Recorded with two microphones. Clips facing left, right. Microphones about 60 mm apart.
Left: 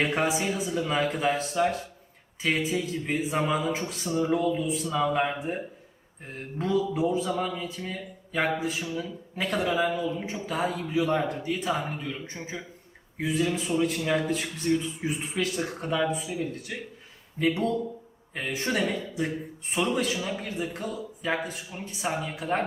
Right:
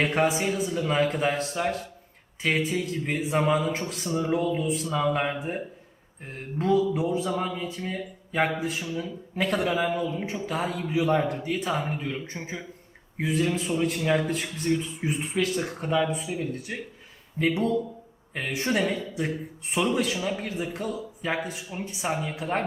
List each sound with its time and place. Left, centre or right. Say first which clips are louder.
0.0 s a man's voice: right 2 dB; centre